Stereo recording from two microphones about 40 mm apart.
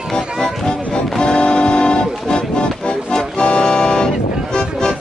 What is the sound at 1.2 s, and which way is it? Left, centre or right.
Music, left.